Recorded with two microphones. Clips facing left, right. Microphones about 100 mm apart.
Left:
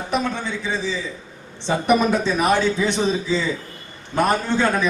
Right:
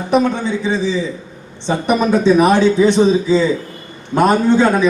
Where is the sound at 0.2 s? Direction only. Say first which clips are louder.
Right 8 dB; 15° right (ahead or behind).